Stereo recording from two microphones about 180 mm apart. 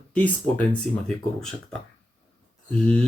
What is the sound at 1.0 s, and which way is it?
Speech, 5° left (ahead or behind).